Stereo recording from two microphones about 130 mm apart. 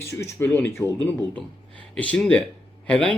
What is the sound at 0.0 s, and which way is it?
Speech, 20° left (ahead or behind).